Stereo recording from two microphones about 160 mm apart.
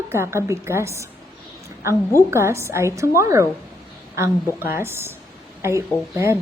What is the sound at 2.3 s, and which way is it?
A woman's voice, 15° right (ahead or behind).